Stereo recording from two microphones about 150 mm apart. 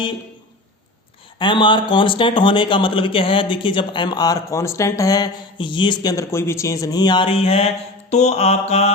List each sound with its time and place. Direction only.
1.4 s speech: 35° left (ahead or behind)
8.1 s mantra: 50° left (ahead or behind)